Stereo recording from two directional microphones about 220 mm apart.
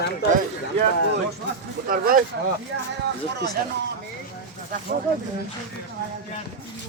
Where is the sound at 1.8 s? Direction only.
40° right (ahead or behind).